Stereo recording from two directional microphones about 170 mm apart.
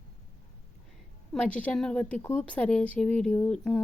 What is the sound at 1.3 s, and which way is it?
A woman's voice, 5° left (ahead or behind).